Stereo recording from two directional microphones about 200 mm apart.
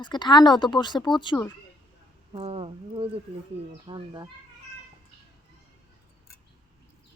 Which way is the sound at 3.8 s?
20° right (ahead or behind).